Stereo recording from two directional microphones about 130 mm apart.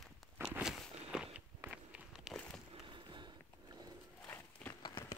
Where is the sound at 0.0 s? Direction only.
5° right (ahead or behind).